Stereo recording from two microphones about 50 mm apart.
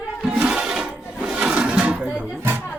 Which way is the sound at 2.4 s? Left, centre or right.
Right.